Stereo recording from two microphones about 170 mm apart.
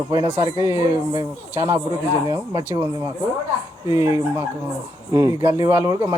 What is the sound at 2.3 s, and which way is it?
Speech, 20° right (ahead or behind).